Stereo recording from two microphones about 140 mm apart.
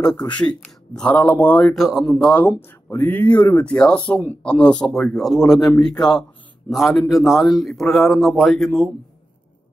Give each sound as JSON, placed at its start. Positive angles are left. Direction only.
{"t": 0.1, "sound": "a man's voice", "side_deg": 30}
{"t": 0.4, "sound": "speech", "side_deg": 5}
{"t": 1.7, "sound": "a man's voice", "side_deg": 0}
{"t": 2.6, "sound": "a man's voice", "side_deg": 15}